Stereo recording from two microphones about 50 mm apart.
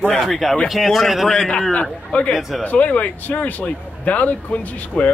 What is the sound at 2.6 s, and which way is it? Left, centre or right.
Speech, left.